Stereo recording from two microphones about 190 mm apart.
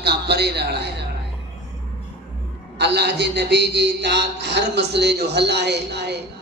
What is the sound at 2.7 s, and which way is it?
A man's voice, 60° right (ahead or behind).